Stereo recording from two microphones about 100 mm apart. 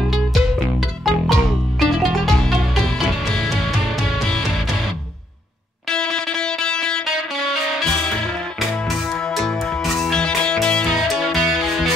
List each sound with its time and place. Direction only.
0.3 s music: centre (ahead or behind)
5.9 s music: 5° left (ahead or behind)